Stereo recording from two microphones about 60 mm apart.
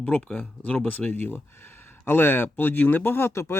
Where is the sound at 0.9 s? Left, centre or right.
Left.